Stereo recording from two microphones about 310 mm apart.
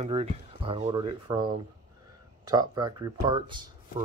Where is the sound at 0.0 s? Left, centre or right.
Centre.